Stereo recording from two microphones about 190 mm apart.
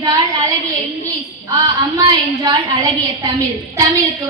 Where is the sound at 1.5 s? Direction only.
20° right (ahead or behind).